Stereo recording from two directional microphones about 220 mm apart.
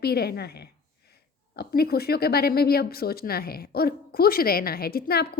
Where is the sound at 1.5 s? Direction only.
45° left (ahead or behind).